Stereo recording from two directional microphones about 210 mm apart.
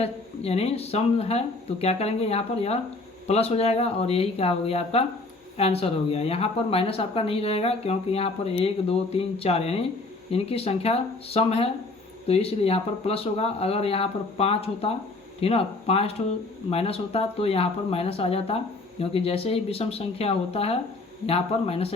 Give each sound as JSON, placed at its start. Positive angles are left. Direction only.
{"t": 0.0, "sound": "speech", "side_deg": 30}